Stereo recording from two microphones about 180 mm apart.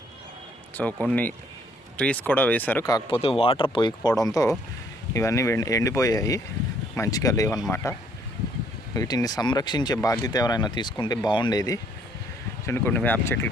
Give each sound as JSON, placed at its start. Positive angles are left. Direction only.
{"t": 1.0, "sound": "speech", "side_deg": 10}
{"t": 3.2, "sound": "speech", "side_deg": 30}
{"t": 9.0, "sound": "speech", "side_deg": 20}